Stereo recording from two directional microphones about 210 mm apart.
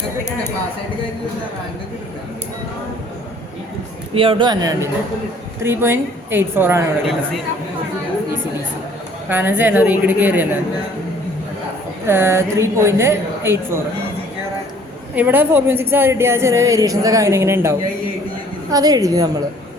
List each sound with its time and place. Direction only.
4.1 s a woman's voice: 25° right (ahead or behind); by 6.8 s 10° right (ahead or behind)
9.3 s a woman's voice: 10° right (ahead or behind)
12.0 s a woman's voice: 10° right (ahead or behind)
15.1 s a woman's voice: 10° right (ahead or behind)